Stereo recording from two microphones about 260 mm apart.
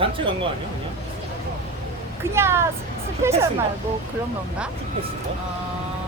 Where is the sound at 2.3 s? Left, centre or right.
Centre.